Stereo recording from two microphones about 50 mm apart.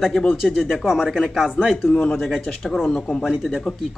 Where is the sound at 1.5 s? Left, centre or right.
Centre.